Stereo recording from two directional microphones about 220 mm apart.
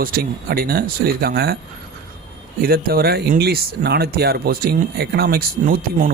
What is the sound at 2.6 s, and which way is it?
Speech, 40° right (ahead or behind).